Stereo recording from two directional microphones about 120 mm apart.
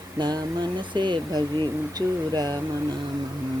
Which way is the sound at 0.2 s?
35° right (ahead or behind).